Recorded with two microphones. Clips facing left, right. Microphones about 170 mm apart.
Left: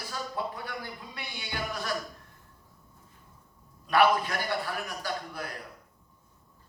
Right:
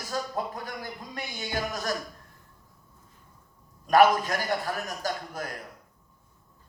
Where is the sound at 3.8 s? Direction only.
45° right (ahead or behind).